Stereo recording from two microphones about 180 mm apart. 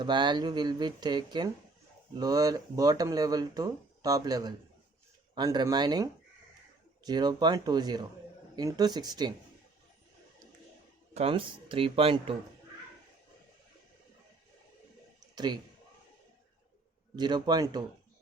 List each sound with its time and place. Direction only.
0.0 s speech: 25° right (ahead or behind)
11.1 s speech: 35° right (ahead or behind)
17.2 s speech: 25° right (ahead or behind)